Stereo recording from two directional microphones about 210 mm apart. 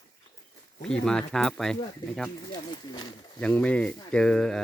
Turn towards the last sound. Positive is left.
turn(degrees=5)  # may be behind; listen again after turning